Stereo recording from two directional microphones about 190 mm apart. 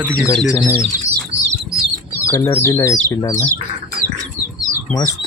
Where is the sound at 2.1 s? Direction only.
15° left (ahead or behind).